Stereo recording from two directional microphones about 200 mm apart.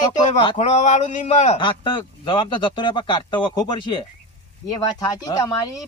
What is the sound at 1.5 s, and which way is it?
Speech, 25° left (ahead or behind).